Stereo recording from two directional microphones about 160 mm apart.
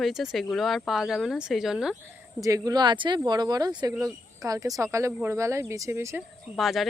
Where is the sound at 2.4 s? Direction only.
20° right (ahead or behind).